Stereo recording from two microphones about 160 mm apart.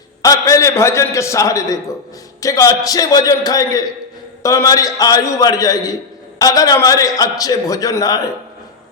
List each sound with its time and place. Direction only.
0.2 s a man's voice: 20° left (ahead or behind)